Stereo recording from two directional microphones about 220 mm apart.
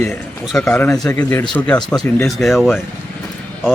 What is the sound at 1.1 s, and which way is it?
Speech, 15° left (ahead or behind).